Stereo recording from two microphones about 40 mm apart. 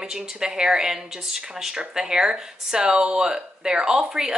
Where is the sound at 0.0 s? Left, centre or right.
Centre.